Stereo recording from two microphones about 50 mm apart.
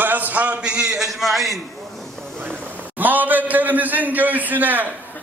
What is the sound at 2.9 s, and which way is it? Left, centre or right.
A man's voice, right.